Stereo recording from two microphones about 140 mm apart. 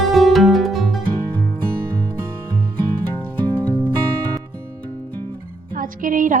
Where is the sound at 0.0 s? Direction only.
Centre (ahead or behind).